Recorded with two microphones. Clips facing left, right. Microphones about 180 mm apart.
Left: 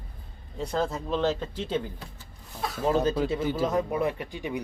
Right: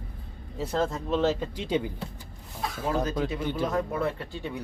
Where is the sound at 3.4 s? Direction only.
5° left (ahead or behind).